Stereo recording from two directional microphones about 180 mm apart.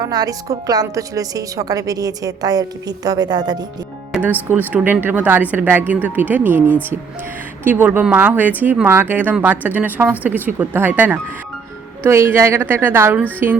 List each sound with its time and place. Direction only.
0.0 s a woman's voice: 20° right (ahead or behind)
4.1 s speech: 10° right (ahead or behind)